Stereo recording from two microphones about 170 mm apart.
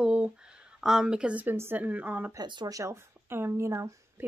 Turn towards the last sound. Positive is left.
turn(degrees=-15)  # may be behind; listen again after turning